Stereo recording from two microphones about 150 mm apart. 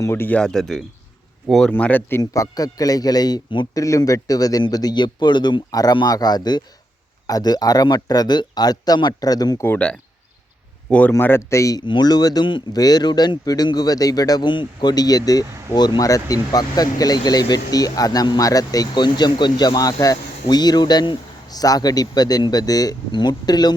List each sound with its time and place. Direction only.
0.0 s speech: 15° left (ahead or behind)
1.7 s speech: 10° left (ahead or behind)
9.6 s speech: 10° left (ahead or behind); by 23.7 s 25° left (ahead or behind)